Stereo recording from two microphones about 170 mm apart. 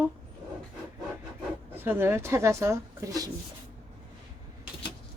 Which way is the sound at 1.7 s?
10° right (ahead or behind).